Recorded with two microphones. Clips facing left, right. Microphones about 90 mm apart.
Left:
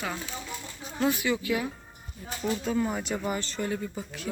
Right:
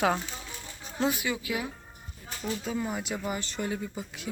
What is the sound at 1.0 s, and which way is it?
Speech, 15° right (ahead or behind).